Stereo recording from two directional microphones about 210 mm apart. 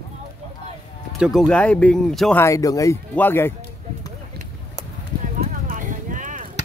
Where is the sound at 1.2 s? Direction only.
Centre (ahead or behind).